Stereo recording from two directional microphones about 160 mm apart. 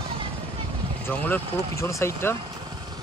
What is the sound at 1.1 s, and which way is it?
Speech, 10° left (ahead or behind).